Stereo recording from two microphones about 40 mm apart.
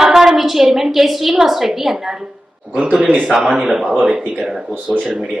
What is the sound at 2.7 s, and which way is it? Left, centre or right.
A woman's voice, right.